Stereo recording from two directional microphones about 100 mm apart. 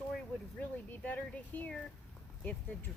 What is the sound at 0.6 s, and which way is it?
Speech, 15° left (ahead or behind).